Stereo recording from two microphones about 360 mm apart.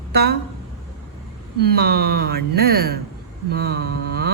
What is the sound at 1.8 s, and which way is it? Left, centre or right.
Speech, right.